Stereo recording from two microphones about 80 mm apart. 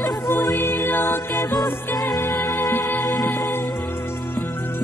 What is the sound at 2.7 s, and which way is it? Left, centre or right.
Music, left.